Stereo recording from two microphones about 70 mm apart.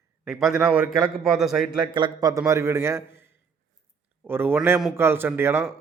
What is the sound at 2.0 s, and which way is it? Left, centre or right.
A man's voice, right.